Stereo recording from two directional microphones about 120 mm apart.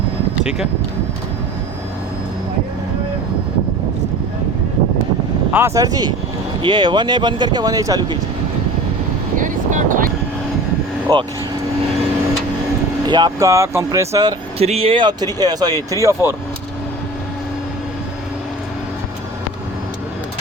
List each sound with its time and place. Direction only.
5.5 s speech: 20° right (ahead or behind); by 8.2 s 35° right (ahead or behind)
9.3 s vehicle: 90° right
11.1 s speech: 35° right (ahead or behind)
13.1 s speech: 35° right (ahead or behind)
14.6 s speech: 55° right (ahead or behind); by 16.3 s 25° right (ahead or behind)